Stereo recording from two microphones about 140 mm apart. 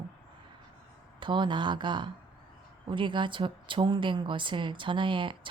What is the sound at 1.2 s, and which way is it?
A woman's voice, 35° right (ahead or behind).